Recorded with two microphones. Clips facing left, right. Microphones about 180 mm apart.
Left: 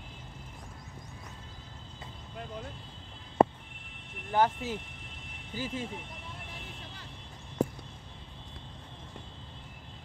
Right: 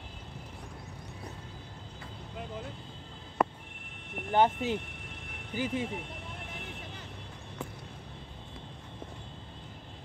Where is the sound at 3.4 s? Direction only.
25° left (ahead or behind).